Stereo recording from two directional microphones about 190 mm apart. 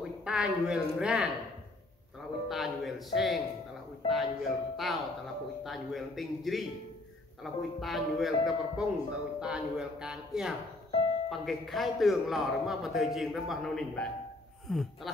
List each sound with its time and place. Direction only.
0.2 s speech: 5° right (ahead or behind)
2.4 s speech: centre (ahead or behind)